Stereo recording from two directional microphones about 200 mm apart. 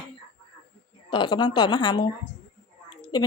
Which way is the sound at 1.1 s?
25° left (ahead or behind).